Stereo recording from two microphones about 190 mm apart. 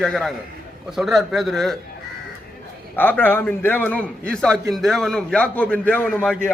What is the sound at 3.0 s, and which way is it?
A man's voice, 10° left (ahead or behind).